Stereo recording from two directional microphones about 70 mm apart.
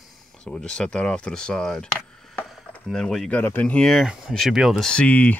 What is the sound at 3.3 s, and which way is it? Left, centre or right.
Speech, left.